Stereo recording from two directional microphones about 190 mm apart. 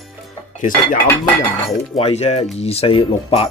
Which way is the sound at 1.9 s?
30° left (ahead or behind).